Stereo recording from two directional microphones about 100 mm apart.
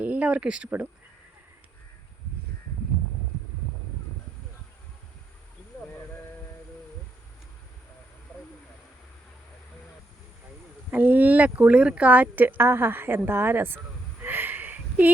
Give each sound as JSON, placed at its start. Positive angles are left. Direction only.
{"t": 0.0, "sound": "speech", "side_deg": -15}
{"t": 10.9, "sound": "speech", "side_deg": -15}